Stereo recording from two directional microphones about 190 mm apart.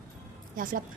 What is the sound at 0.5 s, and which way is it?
Speech, 45° right (ahead or behind).